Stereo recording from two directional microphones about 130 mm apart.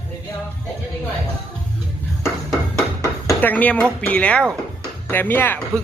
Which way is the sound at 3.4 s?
10° left (ahead or behind).